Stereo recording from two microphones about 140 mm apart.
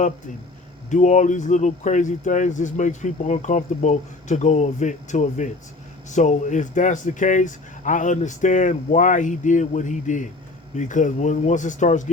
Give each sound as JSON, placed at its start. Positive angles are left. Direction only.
{"t": 0.9, "sound": "speech", "side_deg": 55}